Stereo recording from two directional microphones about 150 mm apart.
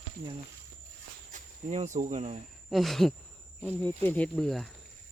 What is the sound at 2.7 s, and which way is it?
Speech, centre (ahead or behind).